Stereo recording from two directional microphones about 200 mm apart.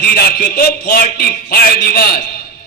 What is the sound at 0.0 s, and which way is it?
A man's voice, 50° left (ahead or behind).